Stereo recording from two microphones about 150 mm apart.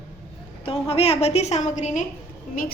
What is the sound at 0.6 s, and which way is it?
A woman's voice, 40° left (ahead or behind).